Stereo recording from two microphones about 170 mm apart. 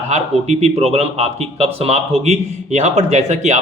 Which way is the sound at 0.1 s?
40° right (ahead or behind).